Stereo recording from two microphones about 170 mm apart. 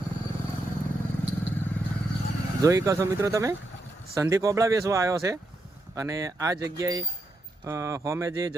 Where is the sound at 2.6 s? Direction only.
20° right (ahead or behind).